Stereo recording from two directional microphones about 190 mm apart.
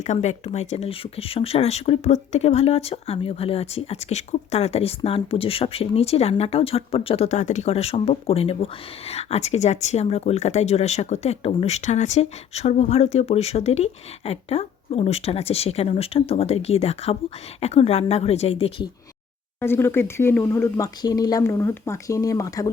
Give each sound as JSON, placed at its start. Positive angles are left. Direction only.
{"t": 0.0, "sound": "speech", "side_deg": 40}
{"t": 19.5, "sound": "speech", "side_deg": 10}